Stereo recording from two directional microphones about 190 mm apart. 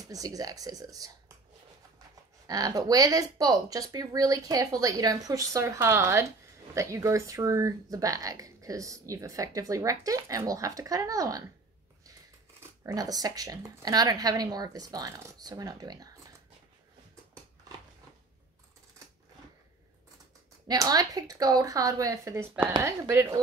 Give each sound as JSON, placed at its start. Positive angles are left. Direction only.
{"t": 0.0, "sound": "speech", "side_deg": -20}
{"t": 2.4, "sound": "speech", "side_deg": -20}
{"t": 12.8, "sound": "speech", "side_deg": -20}
{"t": 17.7, "sound": "a sound", "side_deg": -20}
{"t": 20.6, "sound": "speech", "side_deg": -20}